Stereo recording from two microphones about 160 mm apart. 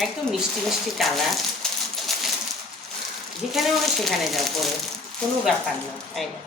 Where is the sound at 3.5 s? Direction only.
Centre (ahead or behind).